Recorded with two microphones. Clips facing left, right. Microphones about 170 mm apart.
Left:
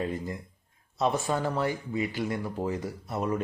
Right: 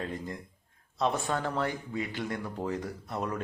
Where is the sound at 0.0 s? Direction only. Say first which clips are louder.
Left 4 dB; 5° left (ahead or behind).